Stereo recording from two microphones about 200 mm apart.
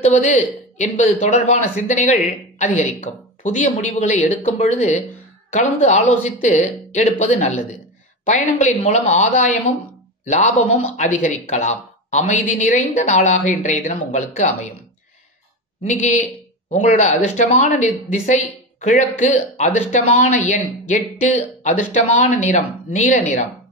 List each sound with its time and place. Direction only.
0.0 s speech: 35° left (ahead or behind)
15.8 s speech: 35° left (ahead or behind)